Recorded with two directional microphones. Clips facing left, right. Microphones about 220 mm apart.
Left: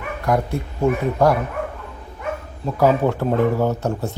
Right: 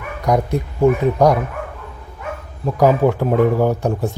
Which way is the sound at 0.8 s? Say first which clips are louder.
Right 5 dB; 15° right (ahead or behind).